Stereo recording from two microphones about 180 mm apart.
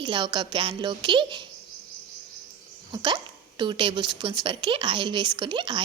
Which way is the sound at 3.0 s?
25° right (ahead or behind).